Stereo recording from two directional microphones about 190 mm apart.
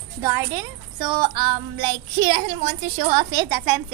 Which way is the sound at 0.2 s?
15° right (ahead or behind).